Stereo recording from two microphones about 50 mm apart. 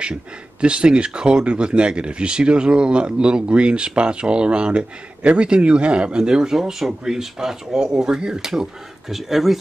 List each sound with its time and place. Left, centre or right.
0.0 s speech: centre